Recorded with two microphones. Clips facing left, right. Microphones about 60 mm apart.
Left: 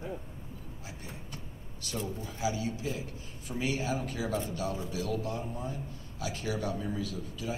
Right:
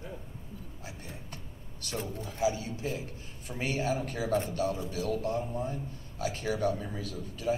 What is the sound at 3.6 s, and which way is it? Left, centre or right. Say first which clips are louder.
A man's voice: right 1 dB; right.